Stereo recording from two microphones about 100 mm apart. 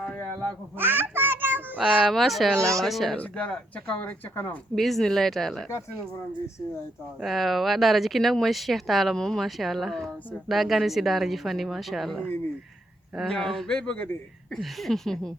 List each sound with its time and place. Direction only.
0.0 s a sound: 10° left (ahead or behind)
0.8 s a sound: 20° right (ahead or behind)
1.8 s speech: centre (ahead or behind)
2.6 s speech: 30° right (ahead or behind)
2.8 s speech: centre (ahead or behind)
3.2 s speech: 10° left (ahead or behind)
4.7 s speech: centre (ahead or behind)
7.2 s speech: centre (ahead or behind)
13.3 s speech: 5° left (ahead or behind)
13.7 s speech: 15° left (ahead or behind)
14.5 s speech: centre (ahead or behind)